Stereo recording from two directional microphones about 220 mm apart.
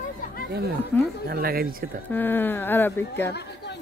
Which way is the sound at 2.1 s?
10° left (ahead or behind).